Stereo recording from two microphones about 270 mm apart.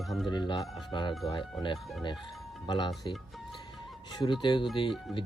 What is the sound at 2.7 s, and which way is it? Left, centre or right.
Speech, centre.